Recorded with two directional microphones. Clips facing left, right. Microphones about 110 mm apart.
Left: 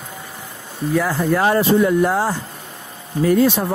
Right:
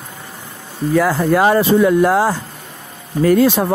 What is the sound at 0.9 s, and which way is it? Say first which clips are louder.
Speech: right 5 dB; 90° right.